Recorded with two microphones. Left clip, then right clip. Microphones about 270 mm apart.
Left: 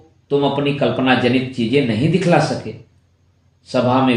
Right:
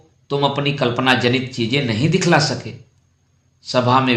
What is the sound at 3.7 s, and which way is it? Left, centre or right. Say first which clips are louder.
Speech: even; right.